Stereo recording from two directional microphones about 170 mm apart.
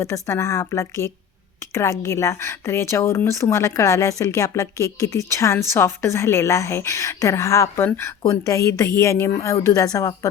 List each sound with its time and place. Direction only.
0.0 s speech: 15° left (ahead or behind)